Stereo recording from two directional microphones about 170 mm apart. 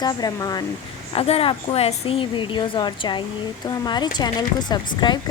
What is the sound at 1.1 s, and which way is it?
A woman's voice, 35° left (ahead or behind).